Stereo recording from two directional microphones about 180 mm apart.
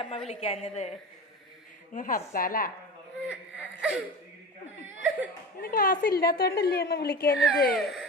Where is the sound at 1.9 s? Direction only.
50° left (ahead or behind).